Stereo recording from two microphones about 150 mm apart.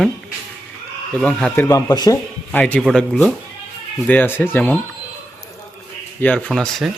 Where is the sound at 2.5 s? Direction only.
10° left (ahead or behind).